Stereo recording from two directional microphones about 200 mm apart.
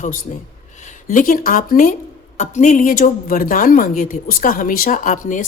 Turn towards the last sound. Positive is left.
turn(degrees=40)  # may be behind; listen again after turning